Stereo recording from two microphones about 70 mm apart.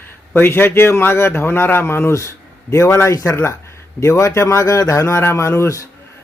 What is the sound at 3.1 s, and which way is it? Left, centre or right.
A man's voice, left.